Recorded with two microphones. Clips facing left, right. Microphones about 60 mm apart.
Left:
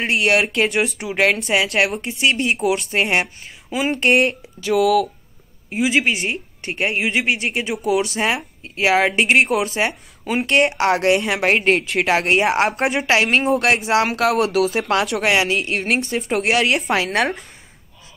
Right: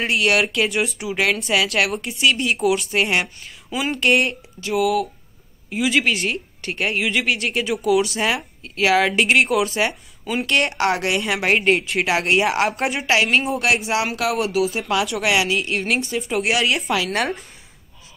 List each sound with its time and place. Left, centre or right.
0.0 s speech: left
0.7 s speech: left
5.9 s speech: centre
10.9 s speech: left
12.1 s speech: left
15.3 s speech: left